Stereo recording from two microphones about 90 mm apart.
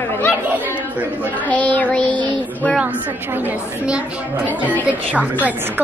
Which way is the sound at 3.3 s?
20° right (ahead or behind).